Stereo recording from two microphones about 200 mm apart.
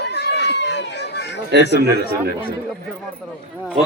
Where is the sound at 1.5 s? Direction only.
55° right (ahead or behind).